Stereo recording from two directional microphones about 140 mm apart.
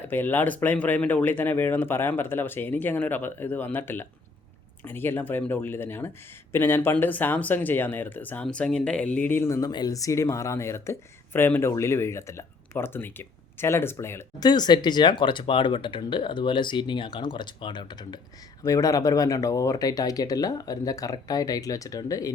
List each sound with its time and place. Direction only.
0.1 s speech: 15° left (ahead or behind)
14.4 s speech: 30° left (ahead or behind)